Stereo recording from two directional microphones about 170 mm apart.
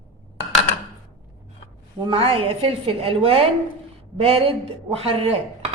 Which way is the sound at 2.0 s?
30° right (ahead or behind).